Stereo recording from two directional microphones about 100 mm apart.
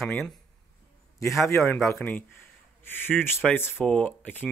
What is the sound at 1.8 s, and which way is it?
Speech, centre (ahead or behind).